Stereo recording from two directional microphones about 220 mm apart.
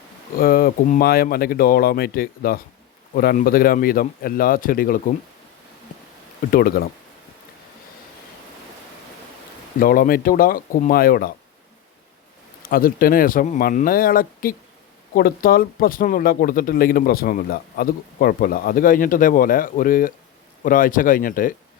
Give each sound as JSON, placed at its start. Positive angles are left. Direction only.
{"t": 0.3, "sound": "speech", "side_deg": 40}
{"t": 6.5, "sound": "speech", "side_deg": 40}
{"t": 9.8, "sound": "speech", "side_deg": 40}
{"t": 12.6, "sound": "speech", "side_deg": 40}